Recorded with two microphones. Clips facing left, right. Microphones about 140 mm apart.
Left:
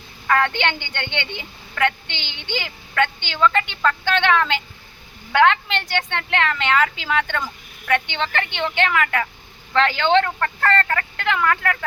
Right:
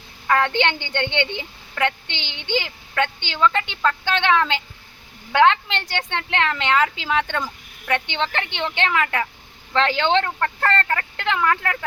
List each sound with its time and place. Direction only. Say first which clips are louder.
0.3 s a woman's voice: even; 20° right (ahead or behind)